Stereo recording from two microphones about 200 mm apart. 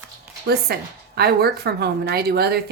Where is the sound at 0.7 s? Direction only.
50° right (ahead or behind).